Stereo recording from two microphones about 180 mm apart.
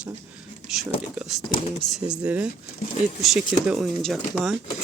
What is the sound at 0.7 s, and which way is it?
Speech, centre (ahead or behind).